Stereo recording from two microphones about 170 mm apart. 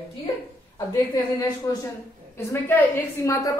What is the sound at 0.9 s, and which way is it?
A woman's voice, 20° left (ahead or behind).